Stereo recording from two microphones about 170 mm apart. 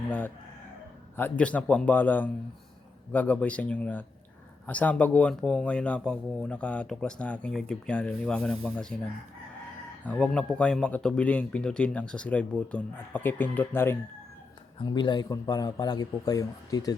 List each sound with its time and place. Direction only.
1.1 s speech: 10° left (ahead or behind)
10.0 s speech: 5° left (ahead or behind)
14.8 s a man's voice: 25° left (ahead or behind)